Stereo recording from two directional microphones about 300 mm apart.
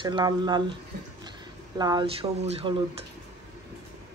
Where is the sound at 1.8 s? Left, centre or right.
Centre.